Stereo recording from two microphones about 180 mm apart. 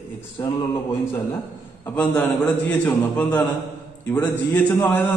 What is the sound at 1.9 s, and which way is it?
A man's voice, 5° left (ahead or behind).